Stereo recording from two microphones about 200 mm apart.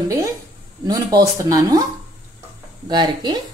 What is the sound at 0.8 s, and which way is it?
Speech, 15° right (ahead or behind).